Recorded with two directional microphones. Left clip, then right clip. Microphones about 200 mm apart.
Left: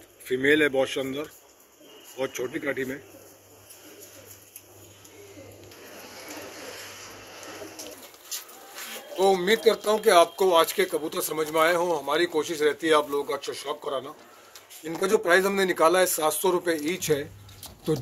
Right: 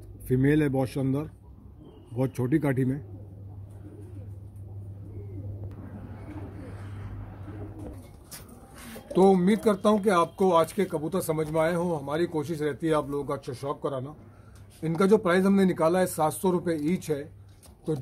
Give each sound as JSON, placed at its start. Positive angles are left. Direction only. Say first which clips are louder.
{"t": 0.3, "sound": "speech", "louder": "left 4 dB", "side_deg": -30}
{"t": 9.2, "sound": "speech", "louder": "left 1 dB", "side_deg": -5}